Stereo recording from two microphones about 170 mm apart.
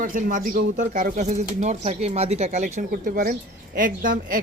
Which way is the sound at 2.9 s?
60° right (ahead or behind).